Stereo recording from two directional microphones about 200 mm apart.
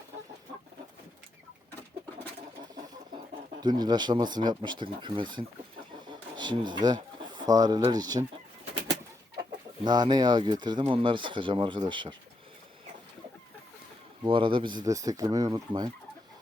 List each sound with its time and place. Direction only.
3.6 s speech: 20° right (ahead or behind)
9.8 s speech: 20° right (ahead or behind)
14.3 s speech: 25° right (ahead or behind)